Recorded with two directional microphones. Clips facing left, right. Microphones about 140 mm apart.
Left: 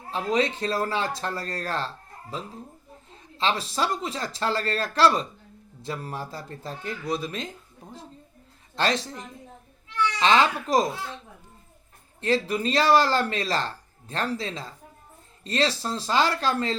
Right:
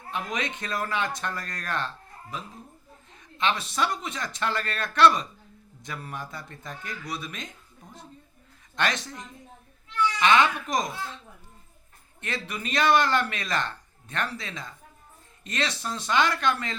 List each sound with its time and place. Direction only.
0.1 s speech: 30° left (ahead or behind)
12.2 s speech: 30° left (ahead or behind)